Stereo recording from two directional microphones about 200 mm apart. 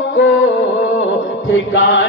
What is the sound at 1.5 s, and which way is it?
Chant, 70° left (ahead or behind).